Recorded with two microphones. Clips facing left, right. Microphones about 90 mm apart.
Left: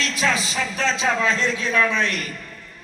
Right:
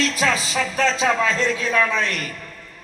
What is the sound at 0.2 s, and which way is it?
A woman's voice, 45° right (ahead or behind).